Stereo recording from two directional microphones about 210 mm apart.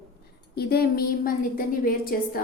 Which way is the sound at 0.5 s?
50° left (ahead or behind).